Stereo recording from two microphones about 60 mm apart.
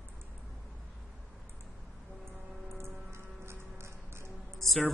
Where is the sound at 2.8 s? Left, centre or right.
Right.